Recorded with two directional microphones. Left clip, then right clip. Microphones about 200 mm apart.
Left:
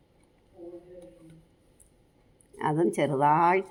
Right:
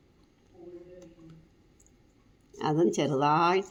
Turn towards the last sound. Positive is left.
turn(degrees=5)  # may be behind; listen again after turning